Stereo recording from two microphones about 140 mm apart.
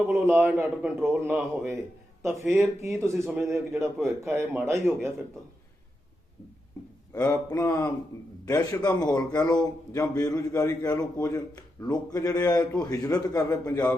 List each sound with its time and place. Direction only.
0.1 s a man's voice: 15° right (ahead or behind)
7.1 s a man's voice: 25° left (ahead or behind)